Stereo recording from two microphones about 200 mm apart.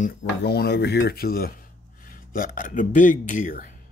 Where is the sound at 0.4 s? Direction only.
55° left (ahead or behind).